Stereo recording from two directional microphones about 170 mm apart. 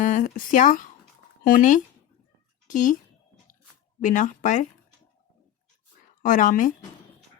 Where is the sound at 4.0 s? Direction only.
50° left (ahead or behind).